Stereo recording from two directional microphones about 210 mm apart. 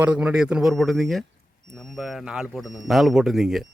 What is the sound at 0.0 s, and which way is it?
A man's voice, 5° right (ahead or behind).